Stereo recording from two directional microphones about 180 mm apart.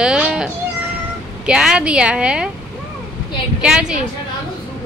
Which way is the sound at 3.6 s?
5° right (ahead or behind).